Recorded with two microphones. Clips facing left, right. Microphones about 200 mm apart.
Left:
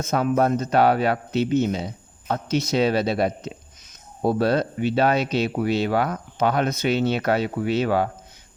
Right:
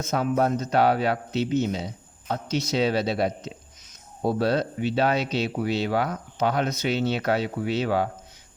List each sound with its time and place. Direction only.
0.0 s speech: 55° left (ahead or behind)